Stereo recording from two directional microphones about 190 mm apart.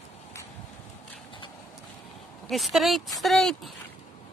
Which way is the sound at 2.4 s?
Centre (ahead or behind).